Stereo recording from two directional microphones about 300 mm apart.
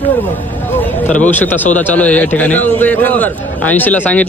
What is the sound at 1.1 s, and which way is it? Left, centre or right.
A man's voice, centre.